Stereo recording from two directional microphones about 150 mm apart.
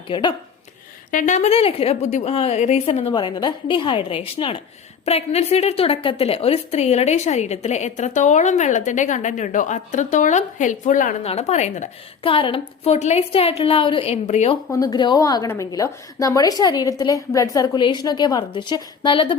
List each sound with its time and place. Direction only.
0.1 s a woman's voice: 30° left (ahead or behind)
1.1 s a woman's voice: 55° left (ahead or behind)
11.3 s a woman's voice: 45° left (ahead or behind)
12.2 s a woman's voice: 35° left (ahead or behind)
14.7 s a woman's voice: 25° left (ahead or behind)